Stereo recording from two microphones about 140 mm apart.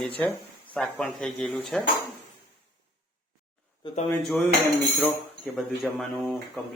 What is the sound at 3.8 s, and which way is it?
Speech, 40° left (ahead or behind).